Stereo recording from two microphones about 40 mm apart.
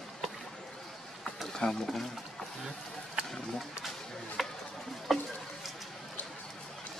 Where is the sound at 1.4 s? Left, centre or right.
Centre.